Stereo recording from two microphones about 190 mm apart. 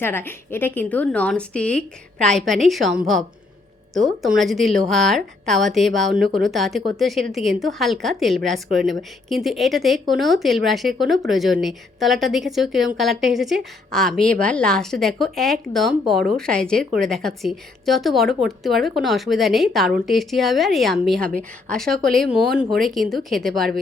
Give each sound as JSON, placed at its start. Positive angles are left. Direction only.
{"t": 0.0, "sound": "a woman's voice", "side_deg": 10}